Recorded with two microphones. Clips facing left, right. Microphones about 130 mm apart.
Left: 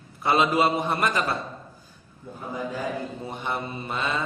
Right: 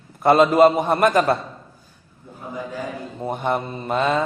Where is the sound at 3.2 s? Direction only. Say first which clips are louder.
Right 13 dB; 50° right (ahead or behind).